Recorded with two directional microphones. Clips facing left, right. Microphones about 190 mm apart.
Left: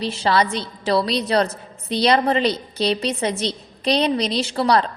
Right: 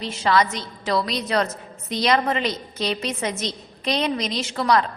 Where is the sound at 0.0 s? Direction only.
30° left (ahead or behind).